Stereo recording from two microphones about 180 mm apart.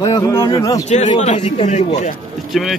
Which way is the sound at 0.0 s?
15° left (ahead or behind).